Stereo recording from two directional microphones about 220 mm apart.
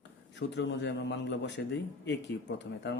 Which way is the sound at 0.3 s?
50° left (ahead or behind).